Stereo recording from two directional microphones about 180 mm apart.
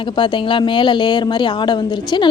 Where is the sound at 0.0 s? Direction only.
25° left (ahead or behind).